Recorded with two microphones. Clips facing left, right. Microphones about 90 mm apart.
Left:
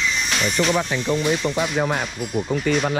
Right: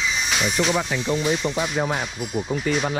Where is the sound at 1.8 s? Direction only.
60° left (ahead or behind).